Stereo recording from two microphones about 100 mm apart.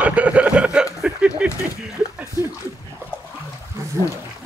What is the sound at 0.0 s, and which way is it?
Chuckle, 15° right (ahead or behind).